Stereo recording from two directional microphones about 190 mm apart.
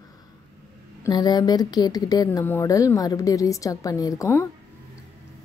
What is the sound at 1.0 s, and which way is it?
Speech, 20° left (ahead or behind).